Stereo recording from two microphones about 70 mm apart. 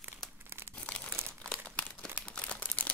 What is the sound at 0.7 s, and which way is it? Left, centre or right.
Crumpling, centre.